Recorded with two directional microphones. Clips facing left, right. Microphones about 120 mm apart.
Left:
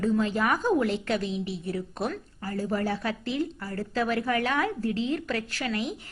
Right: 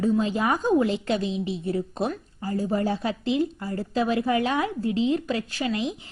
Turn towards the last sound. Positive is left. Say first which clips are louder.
# right 3 dB
turn(degrees=-20)  # may be behind; listen again after turning